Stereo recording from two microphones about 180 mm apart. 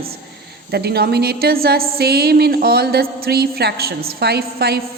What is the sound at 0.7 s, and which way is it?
A woman's voice, 65° right (ahead or behind).